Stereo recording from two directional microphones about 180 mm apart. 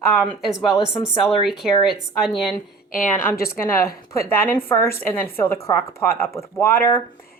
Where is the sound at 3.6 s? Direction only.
15° left (ahead or behind).